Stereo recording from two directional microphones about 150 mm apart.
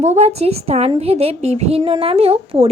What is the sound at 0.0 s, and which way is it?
A woman's voice, 50° right (ahead or behind).